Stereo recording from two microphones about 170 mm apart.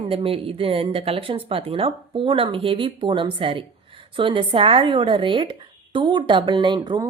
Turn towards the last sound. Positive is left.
turn(degrees=-25)  # may be behind; listen again after turning